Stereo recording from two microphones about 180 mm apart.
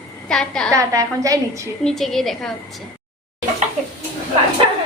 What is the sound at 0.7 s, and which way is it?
Speech, 20° right (ahead or behind).